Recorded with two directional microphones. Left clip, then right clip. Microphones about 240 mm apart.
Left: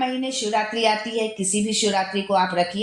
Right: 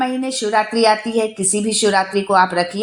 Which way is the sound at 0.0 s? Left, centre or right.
Right.